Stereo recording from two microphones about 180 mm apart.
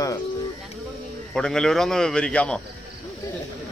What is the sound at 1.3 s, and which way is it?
Speech, 5° left (ahead or behind).